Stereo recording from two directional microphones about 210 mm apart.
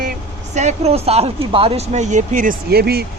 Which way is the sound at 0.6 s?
30° right (ahead or behind).